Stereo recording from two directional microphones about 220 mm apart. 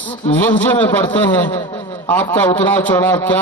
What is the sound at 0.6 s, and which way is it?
A man's voice, 10° left (ahead or behind).